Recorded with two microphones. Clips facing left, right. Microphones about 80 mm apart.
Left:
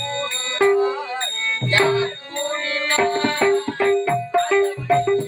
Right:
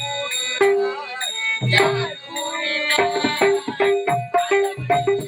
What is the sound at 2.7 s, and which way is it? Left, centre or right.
Music, centre.